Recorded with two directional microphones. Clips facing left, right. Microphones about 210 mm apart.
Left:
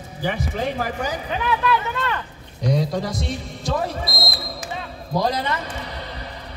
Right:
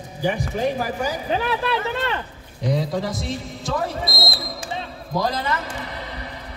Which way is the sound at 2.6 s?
Centre (ahead or behind).